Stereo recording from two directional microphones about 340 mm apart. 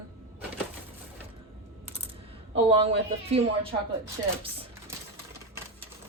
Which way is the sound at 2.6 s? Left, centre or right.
Centre.